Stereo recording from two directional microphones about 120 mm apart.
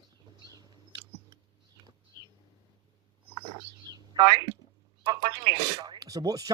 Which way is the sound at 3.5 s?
35° right (ahead or behind).